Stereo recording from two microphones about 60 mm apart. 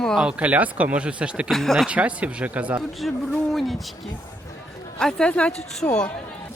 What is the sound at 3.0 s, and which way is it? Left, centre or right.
Speech, centre.